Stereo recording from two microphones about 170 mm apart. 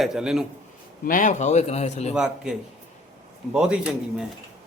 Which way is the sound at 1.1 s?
50° left (ahead or behind).